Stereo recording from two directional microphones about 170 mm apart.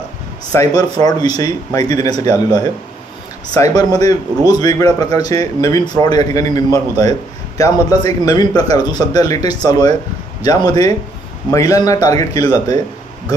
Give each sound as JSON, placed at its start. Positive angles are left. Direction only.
{"t": 0.5, "sound": "a man's voice", "side_deg": 20}